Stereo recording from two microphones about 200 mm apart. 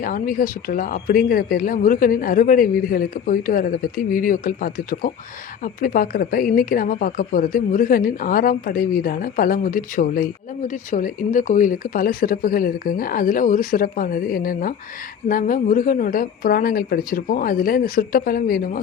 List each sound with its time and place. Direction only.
0.0 s a woman's voice: 45° left (ahead or behind)